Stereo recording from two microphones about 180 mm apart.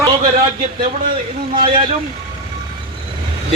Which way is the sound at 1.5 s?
30° right (ahead or behind).